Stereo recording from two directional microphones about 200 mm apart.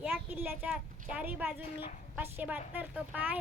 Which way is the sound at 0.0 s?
5° right (ahead or behind).